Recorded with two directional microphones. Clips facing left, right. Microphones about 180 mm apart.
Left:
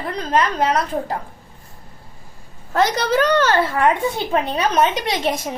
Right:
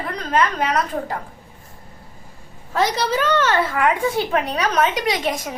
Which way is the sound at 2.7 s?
45° left (ahead or behind).